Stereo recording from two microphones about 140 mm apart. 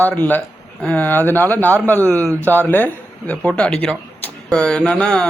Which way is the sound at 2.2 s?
20° right (ahead or behind).